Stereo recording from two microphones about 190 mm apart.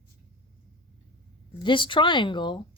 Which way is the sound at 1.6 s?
25° left (ahead or behind).